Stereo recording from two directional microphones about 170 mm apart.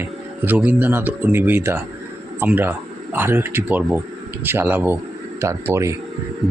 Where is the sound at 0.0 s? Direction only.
10° right (ahead or behind).